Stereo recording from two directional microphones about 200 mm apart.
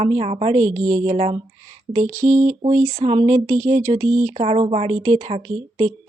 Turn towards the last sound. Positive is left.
turn(degrees=-30)  # may be behind; listen again after turning